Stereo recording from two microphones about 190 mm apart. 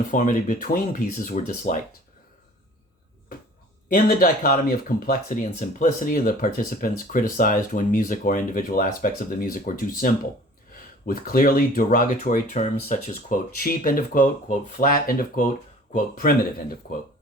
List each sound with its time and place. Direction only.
0.1 s speech: 45° left (ahead or behind)
3.8 s speech: 50° left (ahead or behind)